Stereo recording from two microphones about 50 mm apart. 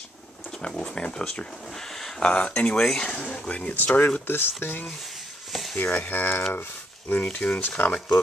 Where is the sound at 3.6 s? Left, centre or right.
Left.